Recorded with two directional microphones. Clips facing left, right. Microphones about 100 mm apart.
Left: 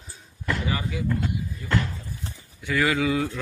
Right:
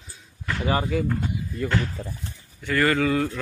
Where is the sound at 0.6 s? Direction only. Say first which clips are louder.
Right 5 dB; 35° right (ahead or behind).